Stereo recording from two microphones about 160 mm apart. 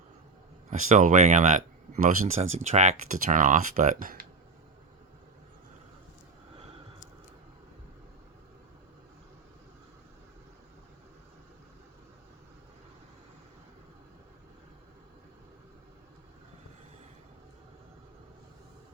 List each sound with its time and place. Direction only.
0.7 s speech: 50° right (ahead or behind)